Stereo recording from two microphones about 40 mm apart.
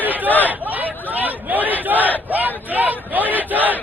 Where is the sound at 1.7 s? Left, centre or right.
Right.